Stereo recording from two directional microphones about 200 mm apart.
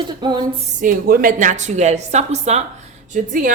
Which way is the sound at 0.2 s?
20° right (ahead or behind).